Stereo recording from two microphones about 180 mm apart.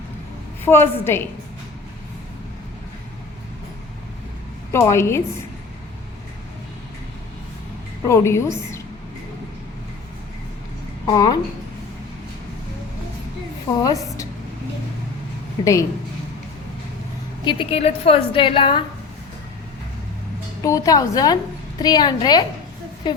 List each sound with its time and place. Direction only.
0.6 s a woman's voice: 15° left (ahead or behind)
4.7 s a woman's voice: 15° left (ahead or behind)
8.0 s a woman's voice: 15° left (ahead or behind)
11.0 s a woman's voice: 20° left (ahead or behind)
13.7 s a woman's voice: 20° left (ahead or behind)
15.6 s a woman's voice: 20° left (ahead or behind)
17.4 s a woman's voice: 25° left (ahead or behind)
20.6 s a woman's voice: 20° left (ahead or behind)